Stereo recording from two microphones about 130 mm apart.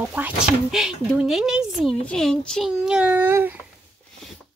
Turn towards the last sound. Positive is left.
turn(degrees=-15)  # may be behind; listen again after turning